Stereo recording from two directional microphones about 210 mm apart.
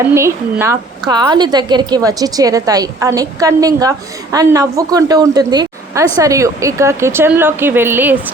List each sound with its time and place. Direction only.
0.1 s a woman's voice: 10° right (ahead or behind)